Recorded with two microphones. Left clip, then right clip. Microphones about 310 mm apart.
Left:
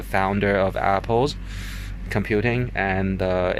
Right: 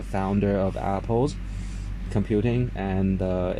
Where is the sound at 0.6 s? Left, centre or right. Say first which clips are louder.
Left 6 dB; left.